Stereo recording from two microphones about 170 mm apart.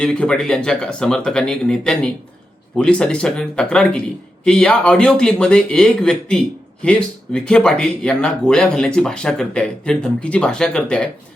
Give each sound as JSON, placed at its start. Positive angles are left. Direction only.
{"t": 0.0, "sound": "speech", "side_deg": 5}